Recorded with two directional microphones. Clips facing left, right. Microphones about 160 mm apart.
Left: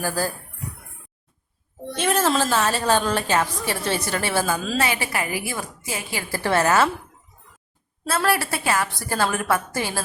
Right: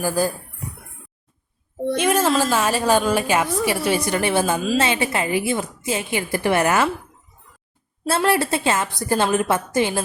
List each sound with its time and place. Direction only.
0.0 s a woman's voice: 15° right (ahead or behind)
2.0 s a woman's voice: 10° right (ahead or behind)
8.0 s a woman's voice: 25° right (ahead or behind)